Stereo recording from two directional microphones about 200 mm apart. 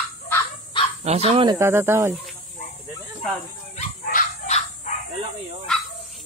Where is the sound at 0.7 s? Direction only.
25° left (ahead or behind).